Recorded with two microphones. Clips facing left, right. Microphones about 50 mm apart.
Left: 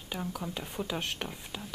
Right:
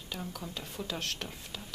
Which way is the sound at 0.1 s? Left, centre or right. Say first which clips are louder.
Left 4 dB; centre.